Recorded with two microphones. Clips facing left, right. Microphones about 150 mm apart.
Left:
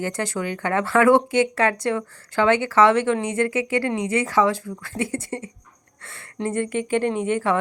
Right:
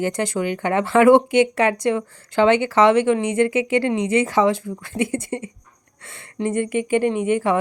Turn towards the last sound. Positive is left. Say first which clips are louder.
# right 3 dB
turn(degrees=-15)  # may be behind; listen again after turning